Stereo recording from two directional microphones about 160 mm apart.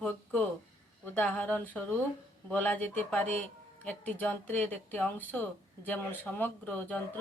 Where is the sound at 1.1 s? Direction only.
10° left (ahead or behind).